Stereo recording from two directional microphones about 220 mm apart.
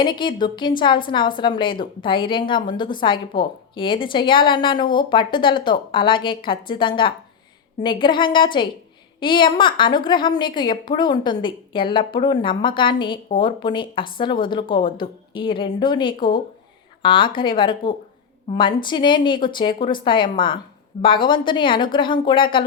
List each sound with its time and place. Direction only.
0.0 s a woman's voice: 20° left (ahead or behind)